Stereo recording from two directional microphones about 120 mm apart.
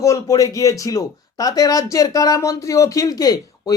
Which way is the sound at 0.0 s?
25° left (ahead or behind).